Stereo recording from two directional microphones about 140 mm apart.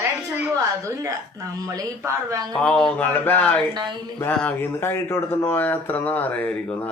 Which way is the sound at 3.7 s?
30° right (ahead or behind).